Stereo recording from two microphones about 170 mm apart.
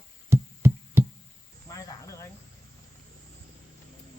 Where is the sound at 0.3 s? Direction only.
15° right (ahead or behind).